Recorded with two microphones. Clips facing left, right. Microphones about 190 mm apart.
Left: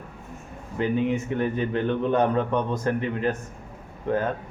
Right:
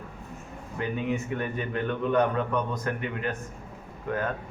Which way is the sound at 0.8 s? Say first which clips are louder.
Left 5 dB; 25° left (ahead or behind).